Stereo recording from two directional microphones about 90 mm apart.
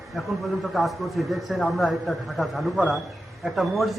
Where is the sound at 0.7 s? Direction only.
Centre (ahead or behind).